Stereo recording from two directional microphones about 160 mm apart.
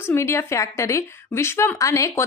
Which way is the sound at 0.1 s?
15° left (ahead or behind).